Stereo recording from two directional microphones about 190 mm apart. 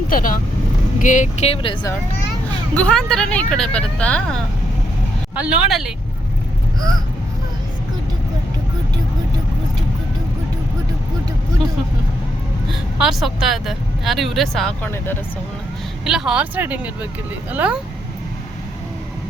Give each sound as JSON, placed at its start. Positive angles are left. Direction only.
{"t": 0.1, "sound": "speech", "side_deg": 45}
{"t": 2.7, "sound": "speech", "side_deg": 5}
{"t": 5.3, "sound": "speech", "side_deg": -5}
{"t": 13.0, "sound": "speech", "side_deg": 0}
{"t": 16.0, "sound": "speech", "side_deg": 0}